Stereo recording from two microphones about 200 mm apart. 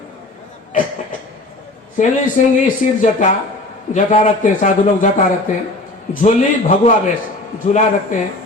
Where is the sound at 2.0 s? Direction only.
40° left (ahead or behind).